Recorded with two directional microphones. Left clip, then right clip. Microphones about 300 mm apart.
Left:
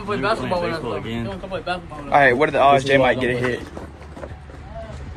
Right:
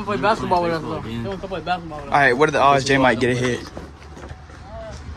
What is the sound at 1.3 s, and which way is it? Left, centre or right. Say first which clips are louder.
Speech: right 5 dB; right.